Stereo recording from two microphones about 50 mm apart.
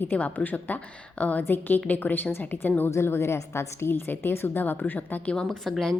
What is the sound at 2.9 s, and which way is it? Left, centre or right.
A woman's voice, left.